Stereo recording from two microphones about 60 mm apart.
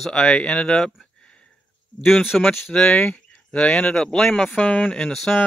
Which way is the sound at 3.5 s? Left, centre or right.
Centre.